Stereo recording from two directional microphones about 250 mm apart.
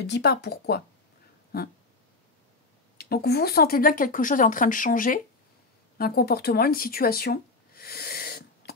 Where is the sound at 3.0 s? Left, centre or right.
Left.